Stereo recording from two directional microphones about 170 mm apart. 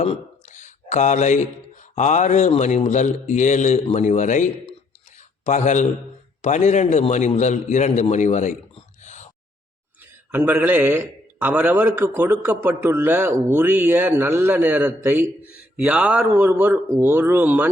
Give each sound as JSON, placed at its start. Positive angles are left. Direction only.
{"t": 0.0, "sound": "speech", "side_deg": 40}
{"t": 5.1, "sound": "a sound", "side_deg": 45}
{"t": 6.4, "sound": "a man's voice", "side_deg": 45}
{"t": 10.3, "sound": "speech", "side_deg": -10}